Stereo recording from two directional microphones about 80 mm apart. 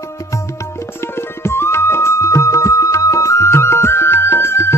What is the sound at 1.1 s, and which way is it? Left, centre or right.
Music, left.